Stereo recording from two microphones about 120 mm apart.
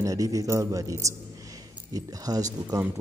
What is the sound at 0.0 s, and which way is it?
Speech, 30° right (ahead or behind).